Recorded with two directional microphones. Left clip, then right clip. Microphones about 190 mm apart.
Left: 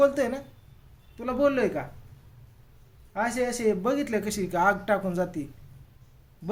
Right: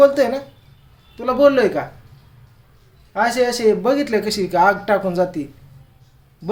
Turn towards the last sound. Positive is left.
turn(degrees=-5)  # may be behind; listen again after turning